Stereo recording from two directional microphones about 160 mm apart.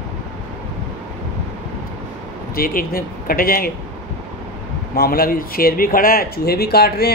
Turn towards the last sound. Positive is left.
turn(degrees=80)